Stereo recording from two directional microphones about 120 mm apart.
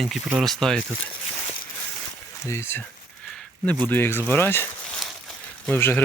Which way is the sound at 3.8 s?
15° left (ahead or behind).